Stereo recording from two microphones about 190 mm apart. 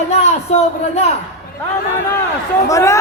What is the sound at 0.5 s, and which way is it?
Speech, 35° left (ahead or behind).